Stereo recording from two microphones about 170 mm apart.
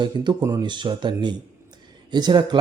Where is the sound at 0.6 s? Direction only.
25° right (ahead or behind).